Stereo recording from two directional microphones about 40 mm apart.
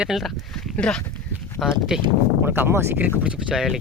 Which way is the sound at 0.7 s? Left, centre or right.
Left.